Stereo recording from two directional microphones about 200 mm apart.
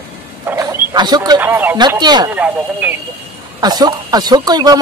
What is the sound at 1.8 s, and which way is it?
Speech, 20° right (ahead or behind).